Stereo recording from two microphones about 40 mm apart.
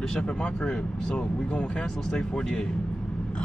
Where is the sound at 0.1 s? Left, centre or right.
Left.